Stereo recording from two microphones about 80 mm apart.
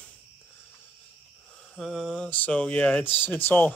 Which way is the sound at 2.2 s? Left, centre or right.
Centre.